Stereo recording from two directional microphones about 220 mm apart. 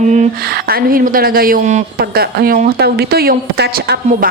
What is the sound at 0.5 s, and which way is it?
A woman's voice, 40° right (ahead or behind).